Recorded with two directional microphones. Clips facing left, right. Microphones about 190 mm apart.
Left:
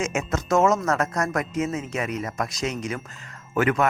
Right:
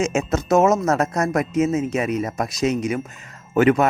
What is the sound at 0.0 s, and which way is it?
Speech, 25° right (ahead or behind).